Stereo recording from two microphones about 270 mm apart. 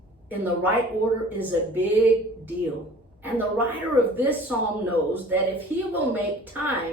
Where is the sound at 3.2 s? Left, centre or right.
Centre.